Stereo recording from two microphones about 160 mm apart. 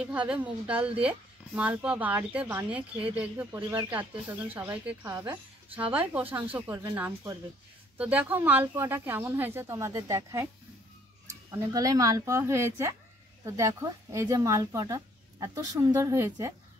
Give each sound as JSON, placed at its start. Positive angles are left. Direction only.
{"t": 0.0, "sound": "speech", "side_deg": -10}
{"t": 5.7, "sound": "speech", "side_deg": -30}
{"t": 6.7, "sound": "speech", "side_deg": -15}
{"t": 11.5, "sound": "speech", "side_deg": -20}